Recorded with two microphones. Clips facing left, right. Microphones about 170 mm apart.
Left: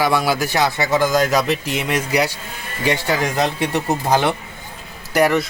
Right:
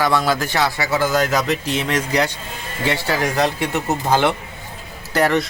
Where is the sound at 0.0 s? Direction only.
10° left (ahead or behind).